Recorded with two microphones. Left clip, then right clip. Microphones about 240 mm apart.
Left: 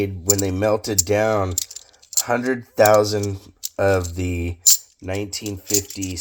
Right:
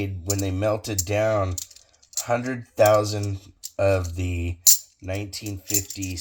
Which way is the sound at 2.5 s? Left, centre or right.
Left.